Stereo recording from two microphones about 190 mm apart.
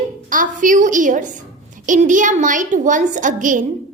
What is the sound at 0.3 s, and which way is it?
A child's voice, 45° right (ahead or behind).